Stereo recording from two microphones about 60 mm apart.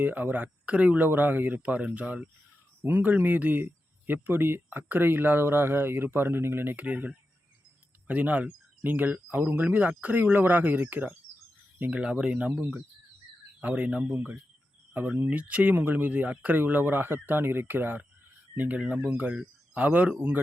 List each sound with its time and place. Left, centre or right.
0.0 s speech: right
6.7 s speech: right
11.9 s speech: centre
13.6 s speech: right
15.7 s speech: right